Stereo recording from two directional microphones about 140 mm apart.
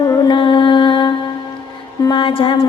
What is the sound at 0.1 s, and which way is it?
Music, 35° left (ahead or behind).